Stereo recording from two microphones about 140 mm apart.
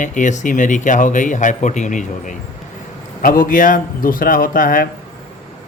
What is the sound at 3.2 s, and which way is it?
A man's voice, 80° left.